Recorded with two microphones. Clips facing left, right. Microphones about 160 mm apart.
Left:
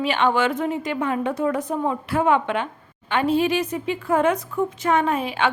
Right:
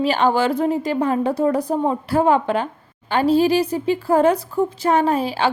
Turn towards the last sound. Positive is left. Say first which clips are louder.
# right 3 dB
turn(degrees=-35)  # may be behind; listen again after turning